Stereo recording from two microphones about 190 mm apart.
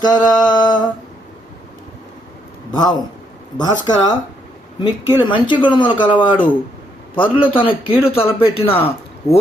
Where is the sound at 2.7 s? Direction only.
20° left (ahead or behind).